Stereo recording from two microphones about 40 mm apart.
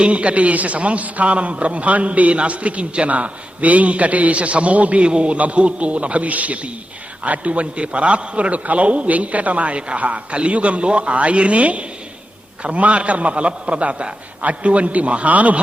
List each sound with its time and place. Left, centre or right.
0.0 s a man's voice: right